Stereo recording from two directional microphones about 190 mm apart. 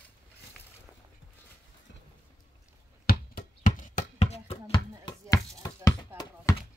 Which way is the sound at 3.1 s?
50° left (ahead or behind).